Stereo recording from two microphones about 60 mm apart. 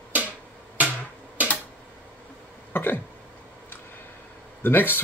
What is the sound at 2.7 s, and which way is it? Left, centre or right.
Speech, left.